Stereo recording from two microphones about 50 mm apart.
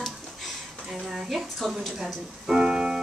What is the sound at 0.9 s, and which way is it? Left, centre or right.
Speech, centre.